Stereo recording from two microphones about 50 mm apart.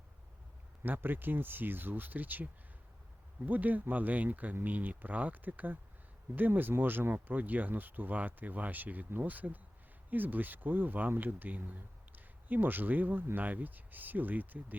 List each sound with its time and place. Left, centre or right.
0.8 s speech: right